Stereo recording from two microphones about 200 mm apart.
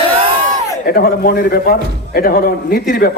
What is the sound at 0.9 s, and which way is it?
A man's voice, 50° left (ahead or behind).